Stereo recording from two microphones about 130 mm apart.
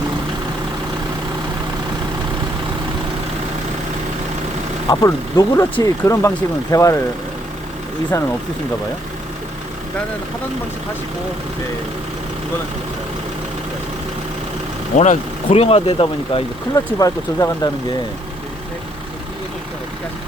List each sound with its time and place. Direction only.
4.9 s speech: 25° left (ahead or behind)
8.1 s speech: 25° left (ahead or behind)
14.9 s speech: 65° left (ahead or behind)
15.4 s speech: 50° left (ahead or behind)
16.7 s speech: 25° left (ahead or behind)